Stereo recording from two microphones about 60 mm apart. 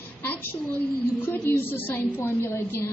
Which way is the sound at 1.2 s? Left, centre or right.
Left.